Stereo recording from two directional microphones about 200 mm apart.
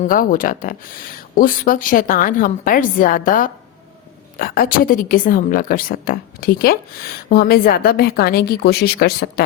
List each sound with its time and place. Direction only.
0.1 s a woman's voice: 45° left (ahead or behind)